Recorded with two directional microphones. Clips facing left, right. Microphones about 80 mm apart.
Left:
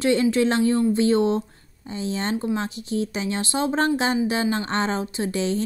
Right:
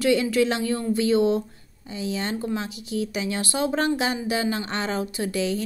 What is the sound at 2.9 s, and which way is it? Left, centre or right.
A woman's voice, left.